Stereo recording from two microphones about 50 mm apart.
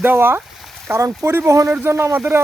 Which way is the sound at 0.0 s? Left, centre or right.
Right.